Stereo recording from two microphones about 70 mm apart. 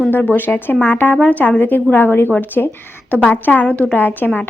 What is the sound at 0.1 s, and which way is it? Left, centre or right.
A woman's voice, left.